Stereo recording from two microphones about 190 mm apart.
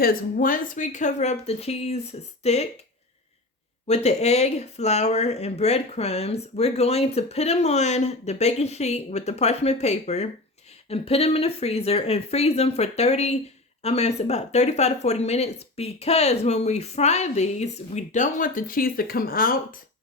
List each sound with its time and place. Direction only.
0.0 s speech: 50° left (ahead or behind)
3.8 s speech: 35° left (ahead or behind)